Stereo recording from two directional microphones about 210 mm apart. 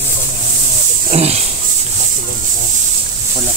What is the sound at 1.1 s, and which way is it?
Speech, 30° right (ahead or behind).